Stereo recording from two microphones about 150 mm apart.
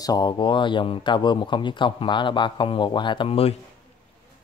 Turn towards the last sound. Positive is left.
turn(degrees=40)  # may be behind; listen again after turning